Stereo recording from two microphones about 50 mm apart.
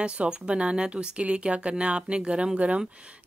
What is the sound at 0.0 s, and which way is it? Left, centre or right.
Speech, right.